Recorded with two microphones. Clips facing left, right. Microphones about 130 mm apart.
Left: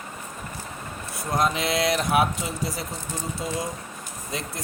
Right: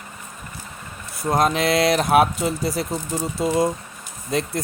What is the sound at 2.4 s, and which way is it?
Speech, 55° right (ahead or behind).